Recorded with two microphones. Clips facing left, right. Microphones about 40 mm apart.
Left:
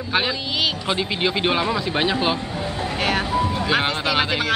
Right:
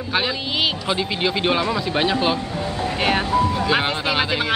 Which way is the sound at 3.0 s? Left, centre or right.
Centre.